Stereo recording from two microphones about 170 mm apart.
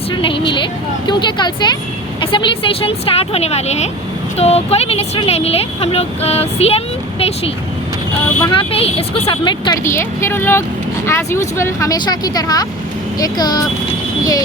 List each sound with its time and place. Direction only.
0.1 s speech: 30° left (ahead or behind)
8.5 s speech: 35° left (ahead or behind)